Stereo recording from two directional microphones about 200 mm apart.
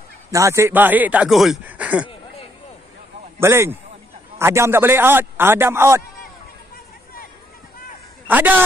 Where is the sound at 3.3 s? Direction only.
10° right (ahead or behind).